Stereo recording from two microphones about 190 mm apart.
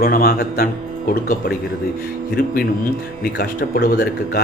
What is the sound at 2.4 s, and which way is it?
A man's voice, 50° left (ahead or behind).